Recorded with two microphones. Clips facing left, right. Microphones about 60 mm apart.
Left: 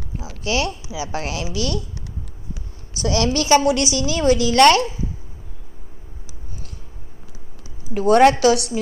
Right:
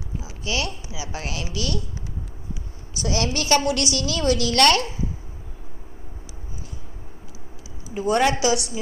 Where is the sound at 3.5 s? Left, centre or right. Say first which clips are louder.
Left 5 dB; centre.